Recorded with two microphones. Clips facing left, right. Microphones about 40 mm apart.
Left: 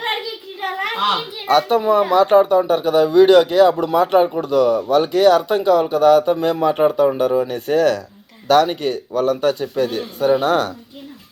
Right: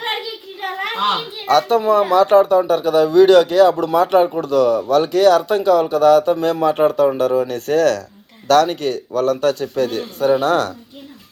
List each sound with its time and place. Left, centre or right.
0.0 s a child's voice: centre